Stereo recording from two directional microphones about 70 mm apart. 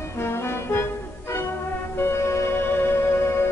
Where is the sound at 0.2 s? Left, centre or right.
Left.